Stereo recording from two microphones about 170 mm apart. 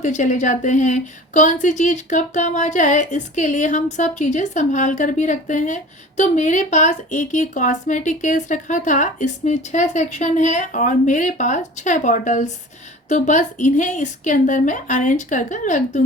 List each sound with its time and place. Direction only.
0.0 s speech: 45° left (ahead or behind)